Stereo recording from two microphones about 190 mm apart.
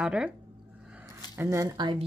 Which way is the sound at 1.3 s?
15° right (ahead or behind).